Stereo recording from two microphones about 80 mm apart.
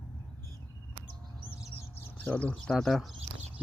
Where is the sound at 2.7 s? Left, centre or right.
Centre.